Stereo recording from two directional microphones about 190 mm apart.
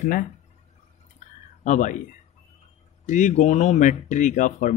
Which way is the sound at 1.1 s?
40° left (ahead or behind).